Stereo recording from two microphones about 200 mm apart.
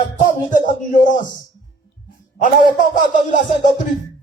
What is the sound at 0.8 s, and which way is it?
Speech, 40° left (ahead or behind).